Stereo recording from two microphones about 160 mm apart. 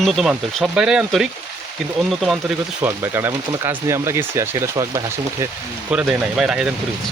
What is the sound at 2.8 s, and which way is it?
Speech, 15° right (ahead or behind).